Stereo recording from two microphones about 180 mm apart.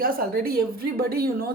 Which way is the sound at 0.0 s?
55° right (ahead or behind).